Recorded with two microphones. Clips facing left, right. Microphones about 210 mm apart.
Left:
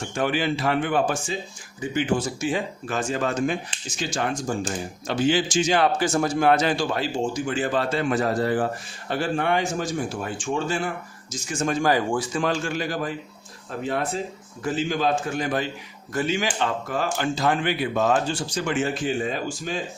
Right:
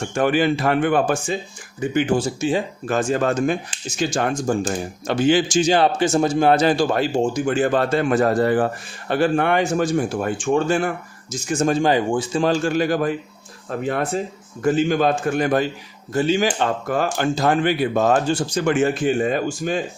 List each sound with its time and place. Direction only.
0.1 s speech: 50° right (ahead or behind)
2.1 s a man's voice: 30° right (ahead or behind)
2.8 s speech: 45° right (ahead or behind)
11.7 s a man's voice: 25° right (ahead or behind)
12.9 s speech: 60° right (ahead or behind)
16.1 s speech: 30° right (ahead or behind)
16.6 s speech: 50° right (ahead or behind)
17.1 s speech: 40° right (ahead or behind)